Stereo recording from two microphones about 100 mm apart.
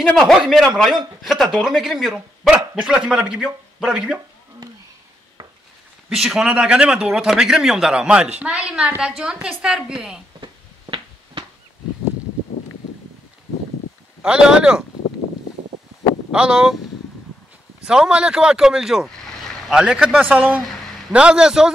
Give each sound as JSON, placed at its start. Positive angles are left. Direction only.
{"t": 0.0, "sound": "speech", "side_deg": 5}
{"t": 6.0, "sound": "a man's voice", "side_deg": -5}
{"t": 10.4, "sound": "a sound", "side_deg": -55}
{"t": 14.2, "sound": "a man's voice", "side_deg": -5}
{"t": 16.3, "sound": "a man's voice", "side_deg": -10}
{"t": 17.8, "sound": "a man's voice", "side_deg": -10}